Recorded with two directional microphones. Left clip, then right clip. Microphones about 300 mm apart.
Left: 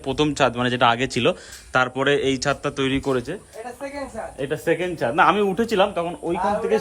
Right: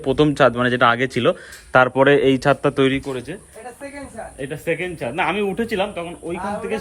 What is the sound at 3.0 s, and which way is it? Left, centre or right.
A man's voice, centre.